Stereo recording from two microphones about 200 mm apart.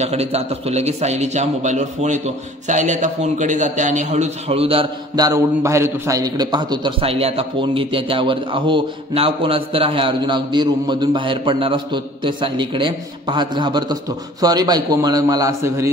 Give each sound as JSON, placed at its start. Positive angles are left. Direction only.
{"t": 0.0, "sound": "a man's voice", "side_deg": -30}